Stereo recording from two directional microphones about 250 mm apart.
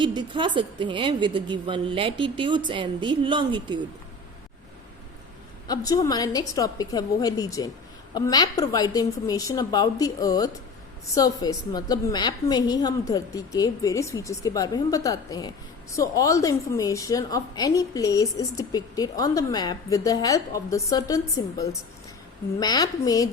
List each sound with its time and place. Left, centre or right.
0.0 s a woman's voice: centre
5.6 s a woman's voice: centre